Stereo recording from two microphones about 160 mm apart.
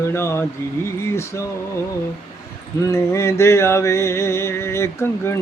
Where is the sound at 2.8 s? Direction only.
15° left (ahead or behind).